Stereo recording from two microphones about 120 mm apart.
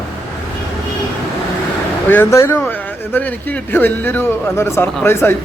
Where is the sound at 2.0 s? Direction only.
15° left (ahead or behind).